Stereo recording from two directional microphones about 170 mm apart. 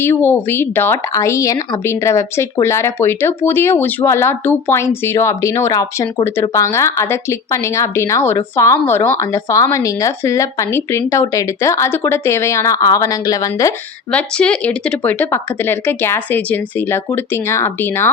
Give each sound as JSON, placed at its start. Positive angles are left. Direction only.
{"t": 0.0, "sound": "speech", "side_deg": 15}
{"t": 14.1, "sound": "speech", "side_deg": 5}